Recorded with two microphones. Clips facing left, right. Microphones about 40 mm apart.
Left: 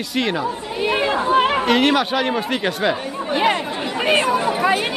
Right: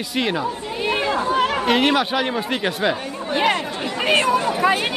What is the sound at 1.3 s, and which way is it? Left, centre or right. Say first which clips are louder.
Chatter: left 5 dB; left.